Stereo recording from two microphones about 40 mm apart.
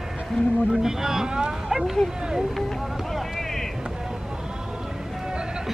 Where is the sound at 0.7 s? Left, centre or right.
Centre.